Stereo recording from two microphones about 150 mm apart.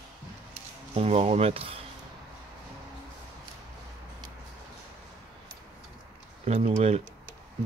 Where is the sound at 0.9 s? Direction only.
40° right (ahead or behind).